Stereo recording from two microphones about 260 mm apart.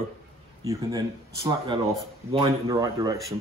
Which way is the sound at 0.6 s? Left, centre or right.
Centre.